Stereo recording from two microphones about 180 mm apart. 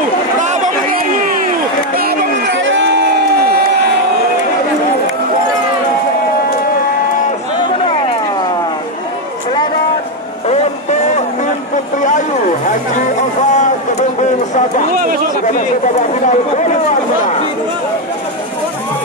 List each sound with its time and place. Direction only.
2.7 s crowd: 80° right
10.5 s vehicle: 40° left (ahead or behind)
12.6 s a sound: 45° left (ahead or behind)